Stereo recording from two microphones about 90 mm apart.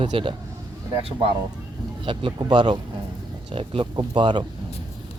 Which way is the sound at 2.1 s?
65° right (ahead or behind).